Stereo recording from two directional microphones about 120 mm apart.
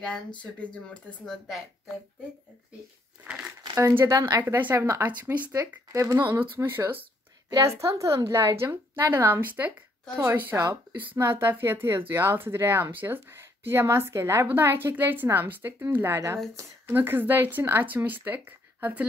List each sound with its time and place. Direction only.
0.8 s speech: 5° left (ahead or behind)
3.7 s a woman's voice: 25° right (ahead or behind)